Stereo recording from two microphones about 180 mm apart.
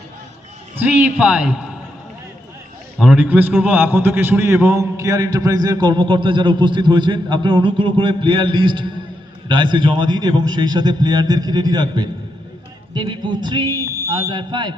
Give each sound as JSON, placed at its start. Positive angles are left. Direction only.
{"t": 0.8, "sound": "a man's voice", "side_deg": -10}
{"t": 3.0, "sound": "a man's voice", "side_deg": -5}
{"t": 13.7, "sound": "a sound", "side_deg": 15}
{"t": 14.1, "sound": "a man's voice", "side_deg": -25}